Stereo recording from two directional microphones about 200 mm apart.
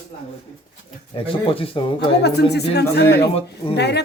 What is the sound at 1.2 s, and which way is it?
Speech, 25° left (ahead or behind).